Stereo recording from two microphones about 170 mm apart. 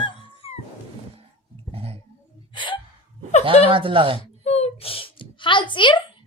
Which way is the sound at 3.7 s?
30° right (ahead or behind).